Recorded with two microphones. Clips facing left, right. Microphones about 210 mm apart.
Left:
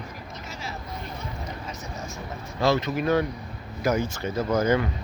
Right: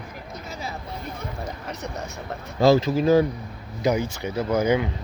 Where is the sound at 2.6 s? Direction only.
30° right (ahead or behind).